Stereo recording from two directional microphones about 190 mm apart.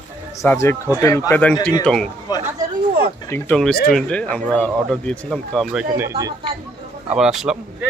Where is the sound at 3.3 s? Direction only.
5° left (ahead or behind); by 6.3 s 15° right (ahead or behind).